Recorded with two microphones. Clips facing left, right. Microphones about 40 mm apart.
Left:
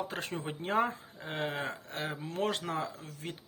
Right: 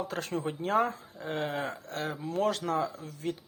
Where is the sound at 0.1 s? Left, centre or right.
Left.